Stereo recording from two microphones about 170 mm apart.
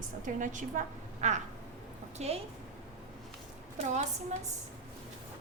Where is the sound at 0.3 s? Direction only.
50° right (ahead or behind).